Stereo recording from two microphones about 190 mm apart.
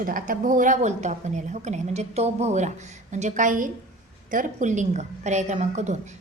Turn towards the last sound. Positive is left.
turn(degrees=-40)  # may be behind; listen again after turning